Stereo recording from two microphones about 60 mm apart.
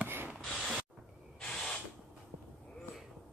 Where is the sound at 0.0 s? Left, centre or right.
Right.